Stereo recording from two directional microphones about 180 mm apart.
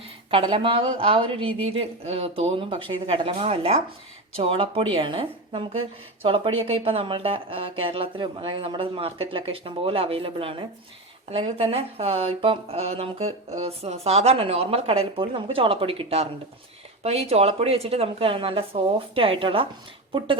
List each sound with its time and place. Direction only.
0.3 s speech: 30° right (ahead or behind)